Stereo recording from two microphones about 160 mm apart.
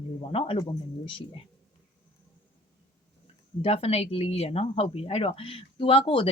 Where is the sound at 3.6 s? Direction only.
40° left (ahead or behind).